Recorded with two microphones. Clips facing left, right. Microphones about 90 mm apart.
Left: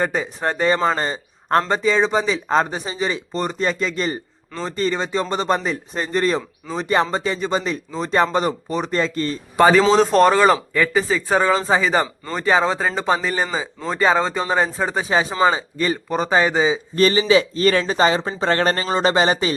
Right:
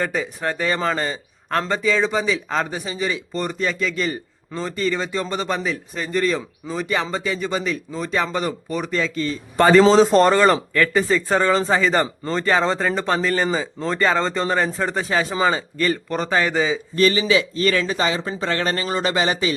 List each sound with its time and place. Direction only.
0.0 s a man's voice: 25° left (ahead or behind)
8.9 s speech: 40° left (ahead or behind)
9.6 s speech: 10° left (ahead or behind)
16.9 s speech: 35° left (ahead or behind)